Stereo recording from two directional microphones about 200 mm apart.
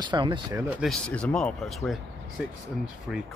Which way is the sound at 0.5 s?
15° right (ahead or behind).